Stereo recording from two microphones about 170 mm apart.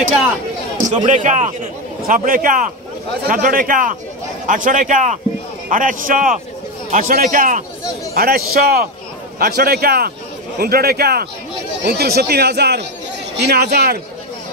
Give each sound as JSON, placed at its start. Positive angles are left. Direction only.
{"t": 0.9, "sound": "a man's voice", "side_deg": -45}
{"t": 8.1, "sound": "a man's voice", "side_deg": -60}